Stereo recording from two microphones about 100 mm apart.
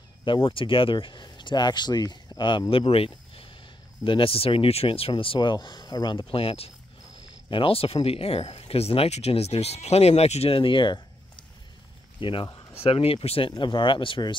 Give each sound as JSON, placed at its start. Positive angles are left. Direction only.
{"t": 0.2, "sound": "speech", "side_deg": 60}
{"t": 2.7, "sound": "speech", "side_deg": 70}
{"t": 6.1, "sound": "speech", "side_deg": 70}
{"t": 7.4, "sound": "speech", "side_deg": 60}
{"t": 10.6, "sound": "a sound", "side_deg": 55}
{"t": 12.2, "sound": "speech", "side_deg": 55}
{"t": 12.7, "sound": "speech", "side_deg": 75}
{"t": 13.5, "sound": "speech", "side_deg": 55}